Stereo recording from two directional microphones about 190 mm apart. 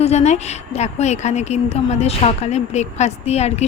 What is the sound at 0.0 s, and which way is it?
A woman's voice, 35° left (ahead or behind).